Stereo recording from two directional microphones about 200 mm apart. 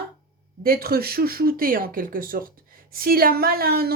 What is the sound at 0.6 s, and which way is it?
A woman's voice, 50° right (ahead or behind).